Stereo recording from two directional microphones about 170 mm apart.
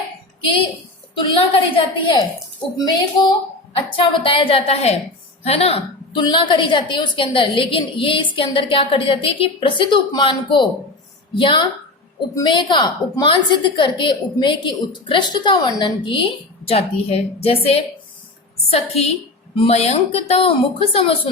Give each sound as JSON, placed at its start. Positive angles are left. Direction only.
{"t": 1.2, "sound": "a woman's voice", "side_deg": 30}